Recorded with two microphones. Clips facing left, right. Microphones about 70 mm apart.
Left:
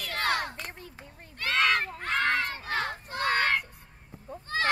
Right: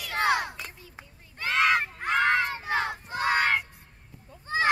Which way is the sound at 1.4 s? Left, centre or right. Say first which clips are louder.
Right 2 dB; centre.